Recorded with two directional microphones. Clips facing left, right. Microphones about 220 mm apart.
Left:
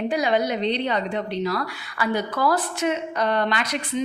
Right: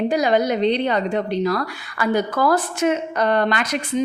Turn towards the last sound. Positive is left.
turn(degrees=-45)  # may be behind; listen again after turning